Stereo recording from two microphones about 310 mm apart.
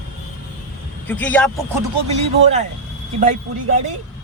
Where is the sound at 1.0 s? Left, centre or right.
Centre.